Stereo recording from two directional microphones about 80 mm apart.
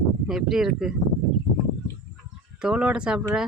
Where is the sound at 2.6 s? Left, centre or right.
Centre.